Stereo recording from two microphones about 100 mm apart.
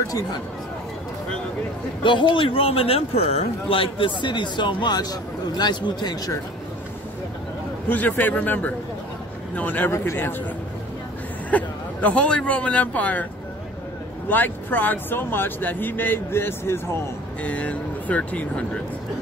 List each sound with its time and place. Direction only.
2.3 s a man's voice: 65° left (ahead or behind); by 6.3 s 45° left (ahead or behind)
7.9 s speech: 15° left (ahead or behind)
11.5 s speech: 15° left (ahead or behind)
14.3 s speech: 20° left (ahead or behind)
17.4 s speech: 15° left (ahead or behind)